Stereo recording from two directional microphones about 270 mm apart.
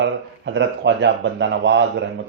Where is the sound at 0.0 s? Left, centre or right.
Right.